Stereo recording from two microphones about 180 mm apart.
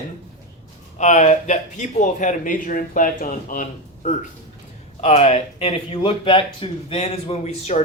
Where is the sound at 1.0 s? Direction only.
40° left (ahead or behind).